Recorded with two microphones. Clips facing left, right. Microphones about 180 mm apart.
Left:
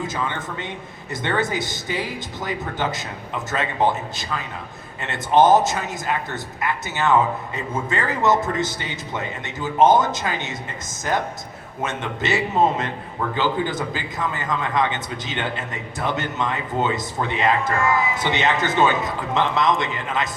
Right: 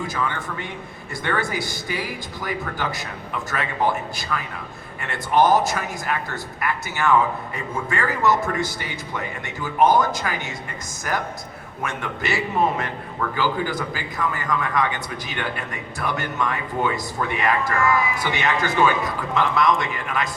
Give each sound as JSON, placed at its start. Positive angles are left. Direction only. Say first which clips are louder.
{"t": 0.1, "sound": "speech", "louder": "even", "side_deg": 20}